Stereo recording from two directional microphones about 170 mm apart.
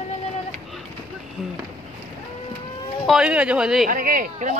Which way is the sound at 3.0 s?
5° right (ahead or behind).